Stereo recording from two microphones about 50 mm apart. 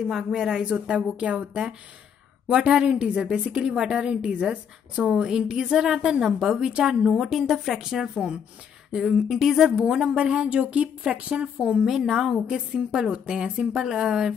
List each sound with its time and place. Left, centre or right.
0.0 s a woman's voice: centre
2.4 s a woman's voice: centre
7.2 s a woman's voice: centre
9.8 s speech: centre
11.8 s a woman's voice: centre